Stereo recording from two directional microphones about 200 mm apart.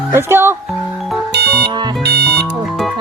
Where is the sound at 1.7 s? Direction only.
20° right (ahead or behind).